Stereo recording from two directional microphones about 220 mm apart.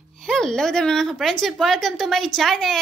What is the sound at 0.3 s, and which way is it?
A woman's voice, centre (ahead or behind).